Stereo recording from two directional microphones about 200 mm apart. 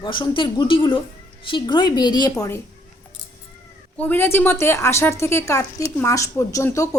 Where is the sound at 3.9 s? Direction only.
10° left (ahead or behind).